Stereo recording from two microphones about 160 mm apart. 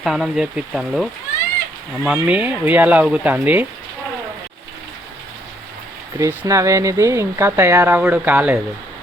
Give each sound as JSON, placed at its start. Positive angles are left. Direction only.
{"t": 0.0, "sound": "speech", "side_deg": 0}
{"t": 2.1, "sound": "speech", "side_deg": -10}
{"t": 6.1, "sound": "speech", "side_deg": -20}